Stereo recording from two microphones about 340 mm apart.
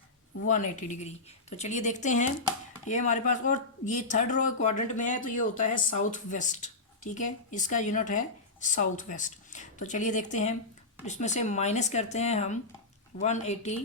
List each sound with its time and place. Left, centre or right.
0.4 s speech: left